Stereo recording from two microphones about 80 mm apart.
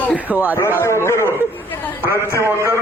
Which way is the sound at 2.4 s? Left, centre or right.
Right.